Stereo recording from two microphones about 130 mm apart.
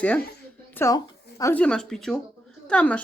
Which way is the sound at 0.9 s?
30° left (ahead or behind).